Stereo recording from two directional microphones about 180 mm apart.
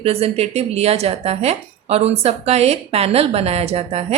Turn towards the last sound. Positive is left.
turn(degrees=-35)  # may be behind; listen again after turning